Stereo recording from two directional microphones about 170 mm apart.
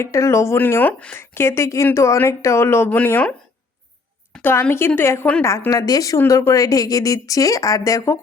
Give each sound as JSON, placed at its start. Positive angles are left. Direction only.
{"t": 0.0, "sound": "speech", "side_deg": 15}
{"t": 4.4, "sound": "a woman's voice", "side_deg": 10}